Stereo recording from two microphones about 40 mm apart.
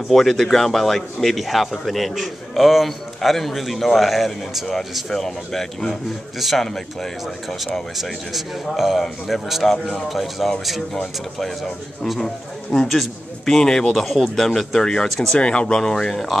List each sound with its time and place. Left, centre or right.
0.1 s a man's voice: centre
7.4 s a man's voice: centre
14.8 s speech: centre
15.8 s speech: centre